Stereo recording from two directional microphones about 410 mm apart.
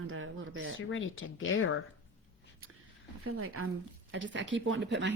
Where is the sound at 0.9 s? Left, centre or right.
Left.